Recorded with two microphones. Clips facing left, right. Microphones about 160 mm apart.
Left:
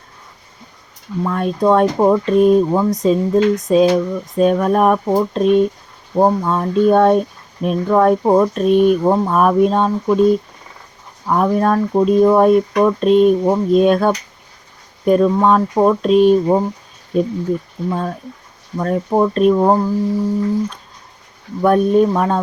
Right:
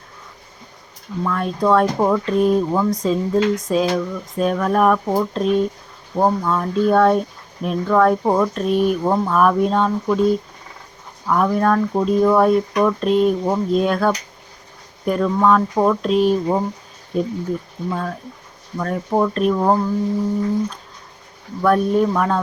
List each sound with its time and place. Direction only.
1.2 s speech: 25° left (ahead or behind)
11.3 s speech: 25° left (ahead or behind)
17.8 s speech: 20° left (ahead or behind)
21.6 s speech: 20° left (ahead or behind)